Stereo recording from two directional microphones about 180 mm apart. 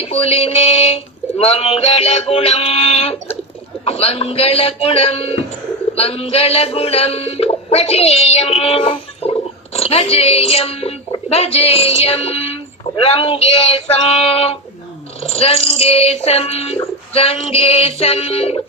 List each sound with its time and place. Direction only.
0.0 s music: 35° left (ahead or behind)